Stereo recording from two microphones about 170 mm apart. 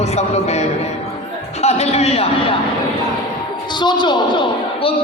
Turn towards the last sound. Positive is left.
turn(degrees=25)  # may be behind; listen again after turning